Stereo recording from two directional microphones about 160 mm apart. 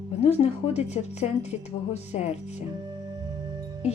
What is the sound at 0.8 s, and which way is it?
Music, 45° left (ahead or behind).